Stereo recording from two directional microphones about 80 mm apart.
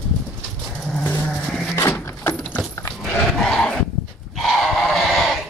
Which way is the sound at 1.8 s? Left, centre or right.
Left.